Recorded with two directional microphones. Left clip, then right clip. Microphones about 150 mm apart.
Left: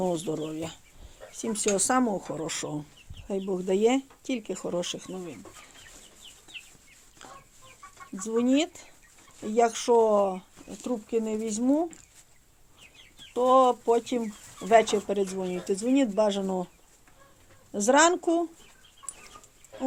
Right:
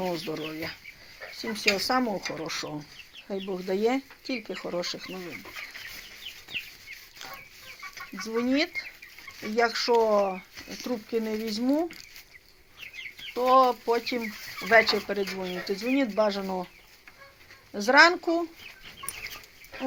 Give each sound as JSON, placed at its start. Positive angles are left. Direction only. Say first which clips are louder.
{"t": 0.0, "sound": "speech", "louder": "left 2 dB", "side_deg": 30}
{"t": 1.4, "sound": "speech", "louder": "right 1 dB", "side_deg": 40}
{"t": 2.1, "sound": "speech", "louder": "even", "side_deg": 25}
{"t": 9.6, "sound": "speech", "louder": "left 1 dB", "side_deg": 30}
{"t": 10.7, "sound": "speech", "louder": "left 1 dB", "side_deg": 5}
{"t": 13.3, "sound": "speech", "louder": "even", "side_deg": 25}
{"t": 17.7, "sound": "speech", "louder": "right 2 dB", "side_deg": 35}